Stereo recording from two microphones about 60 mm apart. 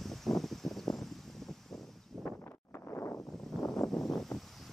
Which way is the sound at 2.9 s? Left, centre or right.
Left.